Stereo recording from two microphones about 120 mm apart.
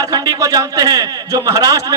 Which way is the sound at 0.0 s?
30° right (ahead or behind).